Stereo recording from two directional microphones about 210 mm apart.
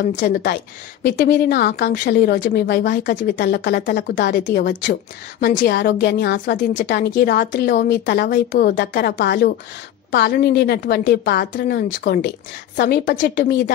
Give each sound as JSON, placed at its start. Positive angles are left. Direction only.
{"t": 0.3, "sound": "speech", "side_deg": 55}
{"t": 5.4, "sound": "a woman's voice", "side_deg": 40}